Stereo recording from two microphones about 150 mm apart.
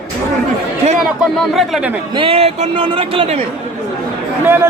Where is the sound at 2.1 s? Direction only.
40° right (ahead or behind).